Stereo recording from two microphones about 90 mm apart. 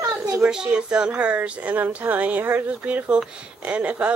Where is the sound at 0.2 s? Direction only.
10° right (ahead or behind).